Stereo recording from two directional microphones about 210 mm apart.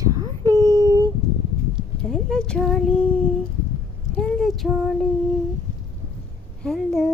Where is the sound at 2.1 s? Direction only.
5° left (ahead or behind).